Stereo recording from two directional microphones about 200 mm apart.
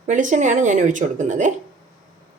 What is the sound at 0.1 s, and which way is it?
Speech, 40° right (ahead or behind).